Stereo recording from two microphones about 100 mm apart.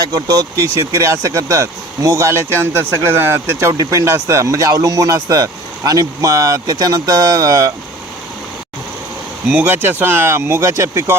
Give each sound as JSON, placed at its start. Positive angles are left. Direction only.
{"t": 0.0, "sound": "speech", "side_deg": -40}
{"t": 9.5, "sound": "speech", "side_deg": -20}